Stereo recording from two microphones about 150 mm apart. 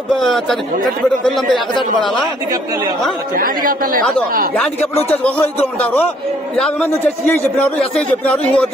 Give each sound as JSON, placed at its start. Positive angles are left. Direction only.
{"t": 0.1, "sound": "speech", "side_deg": 0}
{"t": 3.3, "sound": "speech", "side_deg": -70}
{"t": 4.6, "sound": "a man's voice", "side_deg": 10}